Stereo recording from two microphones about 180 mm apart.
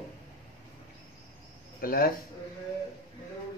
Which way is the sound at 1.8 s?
55° left (ahead or behind).